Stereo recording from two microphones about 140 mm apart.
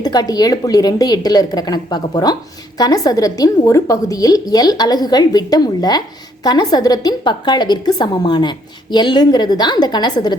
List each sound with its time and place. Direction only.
0.0 s a woman's voice: 30° left (ahead or behind)